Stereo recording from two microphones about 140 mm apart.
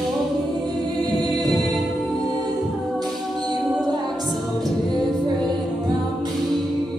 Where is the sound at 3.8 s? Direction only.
Centre (ahead or behind).